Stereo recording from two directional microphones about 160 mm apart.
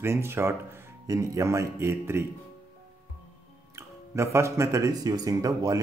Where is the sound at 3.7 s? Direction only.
15° right (ahead or behind).